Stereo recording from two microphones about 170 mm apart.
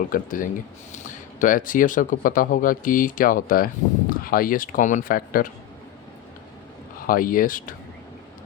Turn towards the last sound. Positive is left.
turn(degrees=55)  # may be behind; listen again after turning